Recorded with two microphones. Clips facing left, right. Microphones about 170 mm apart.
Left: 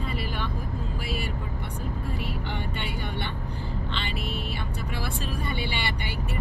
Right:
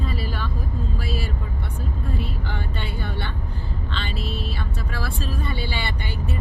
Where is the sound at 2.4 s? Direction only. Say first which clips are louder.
Right 1 dB; 20° left (ahead or behind).